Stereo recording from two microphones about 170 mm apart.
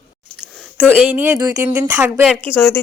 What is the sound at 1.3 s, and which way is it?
Speech, 20° right (ahead or behind).